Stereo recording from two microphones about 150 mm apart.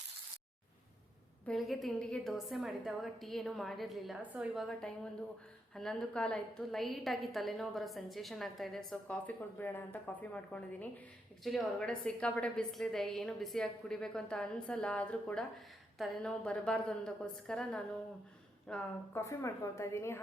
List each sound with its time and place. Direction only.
1.5 s a woman's voice: centre (ahead or behind)
19.1 s a woman's voice: 20° left (ahead or behind)